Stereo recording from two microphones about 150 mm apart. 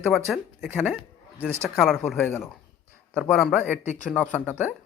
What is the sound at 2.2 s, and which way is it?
Speech, 15° left (ahead or behind).